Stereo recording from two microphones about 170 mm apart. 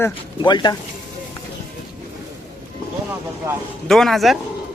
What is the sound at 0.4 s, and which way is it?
Speech, 25° left (ahead or behind).